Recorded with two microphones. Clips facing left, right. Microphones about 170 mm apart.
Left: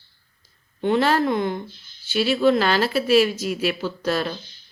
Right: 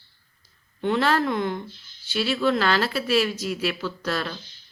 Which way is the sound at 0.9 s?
5° left (ahead or behind).